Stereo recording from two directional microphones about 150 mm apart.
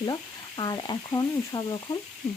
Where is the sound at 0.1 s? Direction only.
25° left (ahead or behind).